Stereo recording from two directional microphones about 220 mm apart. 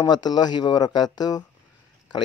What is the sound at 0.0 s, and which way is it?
Speech, 20° left (ahead or behind).